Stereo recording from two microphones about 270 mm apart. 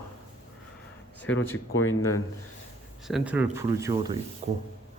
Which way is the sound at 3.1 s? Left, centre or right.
Centre.